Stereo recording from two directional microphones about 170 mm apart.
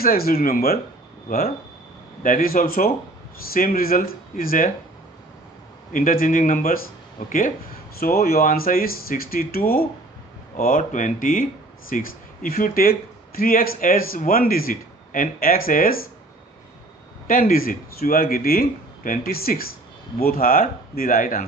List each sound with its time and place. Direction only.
0.0 s speech: 60° left (ahead or behind)
2.2 s speech: 55° left (ahead or behind)
5.9 s speech: 55° left (ahead or behind)
17.3 s speech: 55° left (ahead or behind)